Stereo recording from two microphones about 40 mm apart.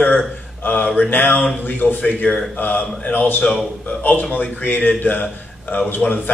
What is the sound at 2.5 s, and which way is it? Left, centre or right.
A man's voice, left.